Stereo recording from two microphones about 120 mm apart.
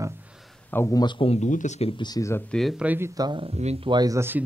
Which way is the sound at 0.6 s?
20° left (ahead or behind).